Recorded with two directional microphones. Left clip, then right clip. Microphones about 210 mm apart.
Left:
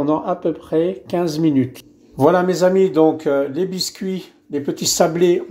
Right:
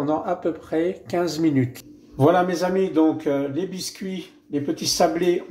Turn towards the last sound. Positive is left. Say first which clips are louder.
# left 4 dB
turn(degrees=50)  # may be behind; listen again after turning